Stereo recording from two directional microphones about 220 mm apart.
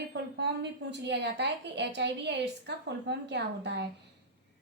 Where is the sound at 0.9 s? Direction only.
50° right (ahead or behind).